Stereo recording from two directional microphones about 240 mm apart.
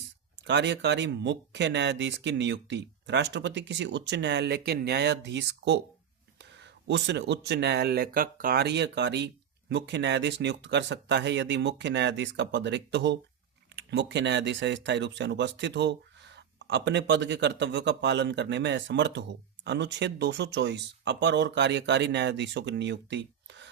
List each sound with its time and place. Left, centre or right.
0.4 s speech: right